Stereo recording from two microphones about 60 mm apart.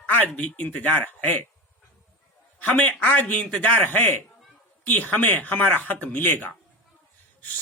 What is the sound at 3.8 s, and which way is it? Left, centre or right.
A man's voice, left.